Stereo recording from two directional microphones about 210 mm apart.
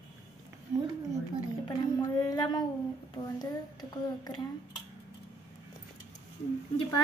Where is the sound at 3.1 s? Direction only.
20° left (ahead or behind).